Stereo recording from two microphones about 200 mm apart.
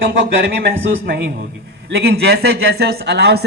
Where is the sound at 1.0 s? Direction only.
55° right (ahead or behind).